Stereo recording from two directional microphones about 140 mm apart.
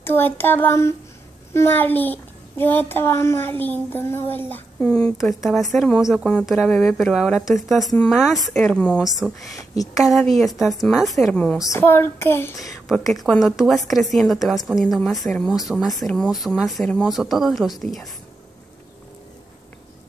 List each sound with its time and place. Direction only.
0.0 s a child's voice: 15° left (ahead or behind)
11.6 s a child's voice: 20° left (ahead or behind)
12.8 s speech: centre (ahead or behind)